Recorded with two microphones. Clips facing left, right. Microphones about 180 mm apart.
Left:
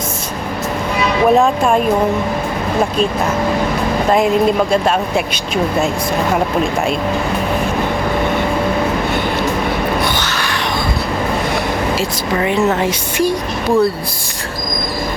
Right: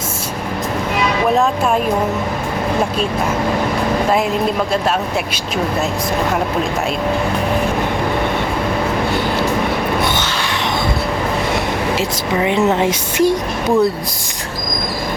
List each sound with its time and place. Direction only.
1.4 s speech: 5° right (ahead or behind)
10.0 s a sound: 25° right (ahead or behind)
11.9 s speech: 20° right (ahead or behind)